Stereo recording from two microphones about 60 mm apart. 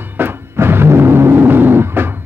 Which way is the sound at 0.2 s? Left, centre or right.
Right.